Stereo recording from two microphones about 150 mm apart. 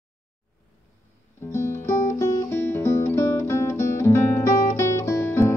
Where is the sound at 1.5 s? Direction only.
15° left (ahead or behind).